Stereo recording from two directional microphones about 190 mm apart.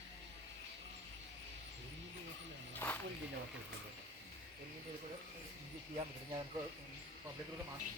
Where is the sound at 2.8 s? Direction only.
10° left (ahead or behind).